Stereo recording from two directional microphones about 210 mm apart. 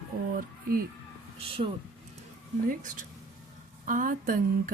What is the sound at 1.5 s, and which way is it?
Speech, 25° right (ahead or behind).